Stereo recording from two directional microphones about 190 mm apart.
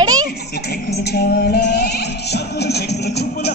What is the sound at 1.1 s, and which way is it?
Music, 55° left (ahead or behind).